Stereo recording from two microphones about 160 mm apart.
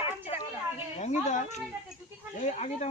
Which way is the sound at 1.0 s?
45° left (ahead or behind).